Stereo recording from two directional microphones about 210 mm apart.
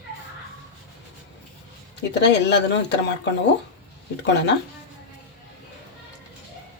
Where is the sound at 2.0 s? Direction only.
55° left (ahead or behind).